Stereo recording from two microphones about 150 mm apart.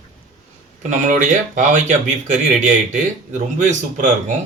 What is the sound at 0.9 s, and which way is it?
A man's voice, 60° right (ahead or behind).